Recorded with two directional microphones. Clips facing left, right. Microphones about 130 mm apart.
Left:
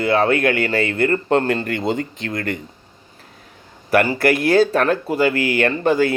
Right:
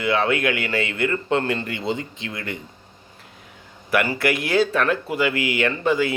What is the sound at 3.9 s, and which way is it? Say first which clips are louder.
Speech: left 5 dB; 40° left (ahead or behind).